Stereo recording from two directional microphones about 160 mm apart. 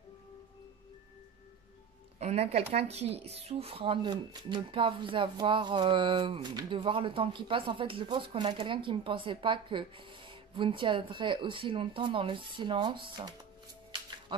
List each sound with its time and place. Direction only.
2.1 s speech: 40° right (ahead or behind)